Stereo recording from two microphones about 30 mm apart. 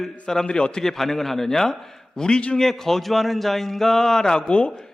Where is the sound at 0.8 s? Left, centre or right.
Centre.